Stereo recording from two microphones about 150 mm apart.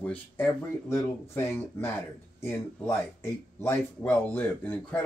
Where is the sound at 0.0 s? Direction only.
10° left (ahead or behind).